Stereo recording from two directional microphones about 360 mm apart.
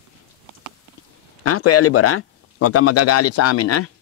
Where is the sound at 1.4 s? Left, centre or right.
Left.